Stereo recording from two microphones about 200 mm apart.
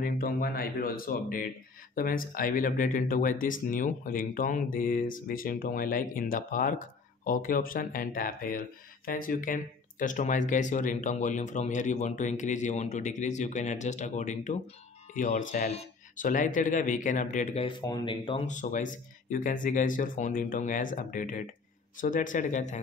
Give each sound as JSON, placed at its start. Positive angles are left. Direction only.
{"t": 0.0, "sound": "speech", "side_deg": 50}
{"t": 18.5, "sound": "speech", "side_deg": 40}